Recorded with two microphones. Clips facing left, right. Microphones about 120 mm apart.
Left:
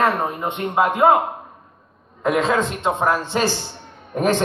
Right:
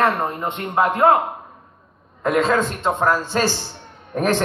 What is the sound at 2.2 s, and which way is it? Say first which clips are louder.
A man's voice: right 1 dB; 20° left (ahead or behind).